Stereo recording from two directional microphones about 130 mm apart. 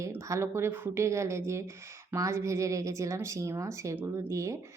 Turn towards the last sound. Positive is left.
turn(degrees=-20)  # may be behind; listen again after turning